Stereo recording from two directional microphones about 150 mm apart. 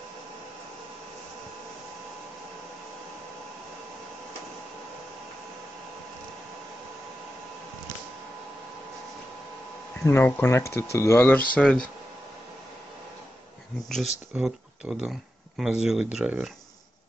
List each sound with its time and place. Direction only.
10.0 s speech: 15° left (ahead or behind)
14.3 s speech: 5° right (ahead or behind)